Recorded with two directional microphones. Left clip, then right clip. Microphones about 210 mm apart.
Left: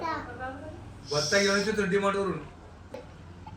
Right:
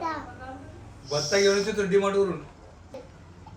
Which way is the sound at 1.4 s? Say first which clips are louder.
Right 4 dB; 25° left (ahead or behind).